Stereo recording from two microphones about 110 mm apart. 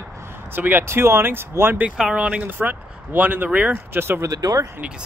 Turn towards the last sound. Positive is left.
turn(degrees=-35)  # may be behind; listen again after turning